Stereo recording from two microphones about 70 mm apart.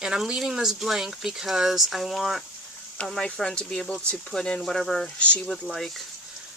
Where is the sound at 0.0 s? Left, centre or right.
Centre.